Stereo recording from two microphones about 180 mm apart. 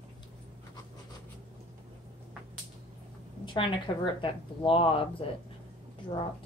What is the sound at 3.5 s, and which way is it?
A woman's voice, 25° left (ahead or behind).